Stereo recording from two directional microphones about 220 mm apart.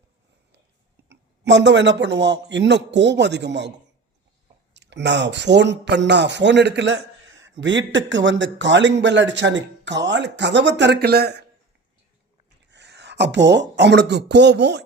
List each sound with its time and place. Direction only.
1.0 s speech: 55° right (ahead or behind)
4.7 s speech: 50° right (ahead or behind)
12.7 s speech: 50° right (ahead or behind)